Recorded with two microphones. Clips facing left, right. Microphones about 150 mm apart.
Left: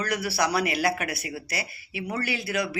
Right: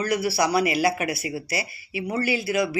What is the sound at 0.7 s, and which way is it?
Speech, 50° left (ahead or behind).